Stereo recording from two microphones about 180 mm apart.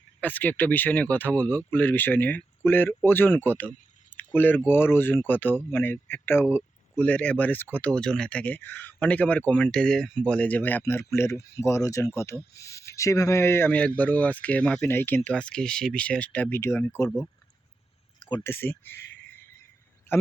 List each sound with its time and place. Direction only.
0.2 s speech: 10° left (ahead or behind)
18.3 s speech: 25° left (ahead or behind)
18.5 s speech: 10° left (ahead or behind)